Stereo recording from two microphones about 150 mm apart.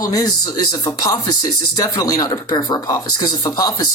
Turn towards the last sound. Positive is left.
turn(degrees=25)  # may be behind; listen again after turning